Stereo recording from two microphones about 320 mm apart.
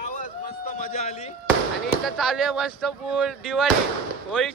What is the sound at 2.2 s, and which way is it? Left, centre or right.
Speech, centre.